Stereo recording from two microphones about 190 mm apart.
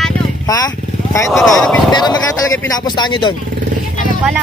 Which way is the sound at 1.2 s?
Centre (ahead or behind).